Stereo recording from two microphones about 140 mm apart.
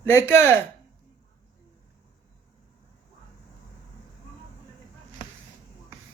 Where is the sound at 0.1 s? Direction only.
20° left (ahead or behind).